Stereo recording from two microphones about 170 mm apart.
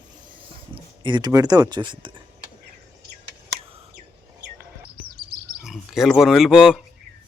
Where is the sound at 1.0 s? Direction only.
25° right (ahead or behind).